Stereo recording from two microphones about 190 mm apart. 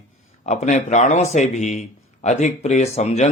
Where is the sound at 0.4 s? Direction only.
40° left (ahead or behind).